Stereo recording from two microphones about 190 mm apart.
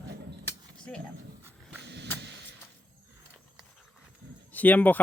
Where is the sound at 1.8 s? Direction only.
65° right (ahead or behind).